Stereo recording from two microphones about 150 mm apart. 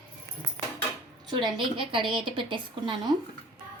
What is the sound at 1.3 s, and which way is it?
A woman's voice, 30° right (ahead or behind).